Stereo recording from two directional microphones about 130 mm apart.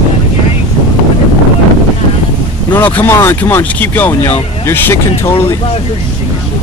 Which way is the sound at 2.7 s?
15° left (ahead or behind).